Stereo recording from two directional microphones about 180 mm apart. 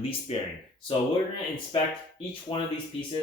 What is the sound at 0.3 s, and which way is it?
Speech, 35° left (ahead or behind).